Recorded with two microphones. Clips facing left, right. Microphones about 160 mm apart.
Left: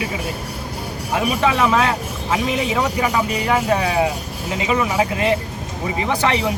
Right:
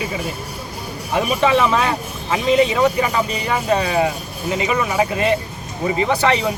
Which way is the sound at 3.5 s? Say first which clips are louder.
Even; 10° left (ahead or behind).